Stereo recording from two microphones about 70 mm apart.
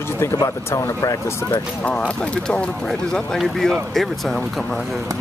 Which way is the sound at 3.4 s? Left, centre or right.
Centre.